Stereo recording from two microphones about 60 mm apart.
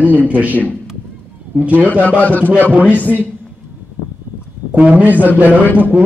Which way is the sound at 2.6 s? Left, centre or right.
Right.